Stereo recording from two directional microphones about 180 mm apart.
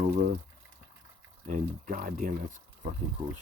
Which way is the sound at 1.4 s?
45° right (ahead or behind).